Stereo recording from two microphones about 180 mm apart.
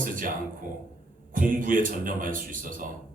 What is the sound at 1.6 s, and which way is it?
A man's voice, 50° right (ahead or behind).